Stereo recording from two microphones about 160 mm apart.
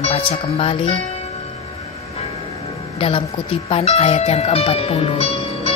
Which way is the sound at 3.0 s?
35° left (ahead or behind).